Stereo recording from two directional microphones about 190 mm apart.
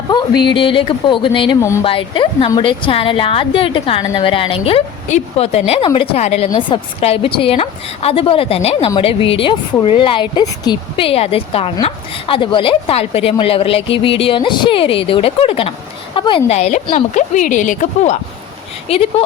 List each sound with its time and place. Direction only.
0.1 s a woman's voice: 25° left (ahead or behind)
16.5 s a woman's voice: 35° left (ahead or behind)